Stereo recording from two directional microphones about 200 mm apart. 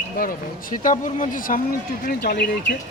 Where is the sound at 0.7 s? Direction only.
40° left (ahead or behind).